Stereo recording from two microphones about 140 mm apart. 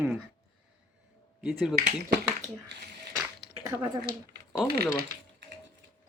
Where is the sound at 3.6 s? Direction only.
20° right (ahead or behind).